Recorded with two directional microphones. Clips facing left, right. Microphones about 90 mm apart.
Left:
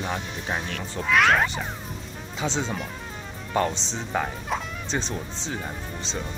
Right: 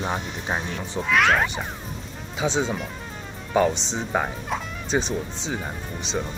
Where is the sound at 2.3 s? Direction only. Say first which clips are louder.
Right 4 dB; 15° right (ahead or behind).